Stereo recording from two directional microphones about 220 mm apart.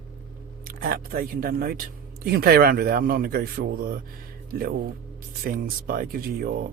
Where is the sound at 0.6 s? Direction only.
40° right (ahead or behind).